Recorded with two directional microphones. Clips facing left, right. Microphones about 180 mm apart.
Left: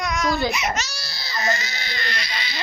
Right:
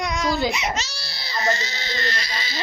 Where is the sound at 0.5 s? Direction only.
30° right (ahead or behind).